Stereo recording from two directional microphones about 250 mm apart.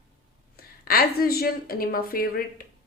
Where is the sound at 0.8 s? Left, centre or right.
Left.